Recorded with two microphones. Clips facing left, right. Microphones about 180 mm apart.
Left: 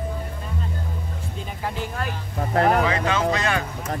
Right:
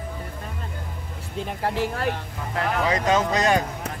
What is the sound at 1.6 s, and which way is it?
Speech, 65° right (ahead or behind).